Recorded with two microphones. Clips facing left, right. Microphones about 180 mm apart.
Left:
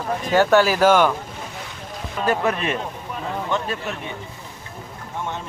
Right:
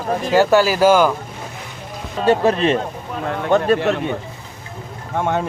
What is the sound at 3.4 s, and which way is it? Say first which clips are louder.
Speech: right 12 dB; 65° right (ahead or behind).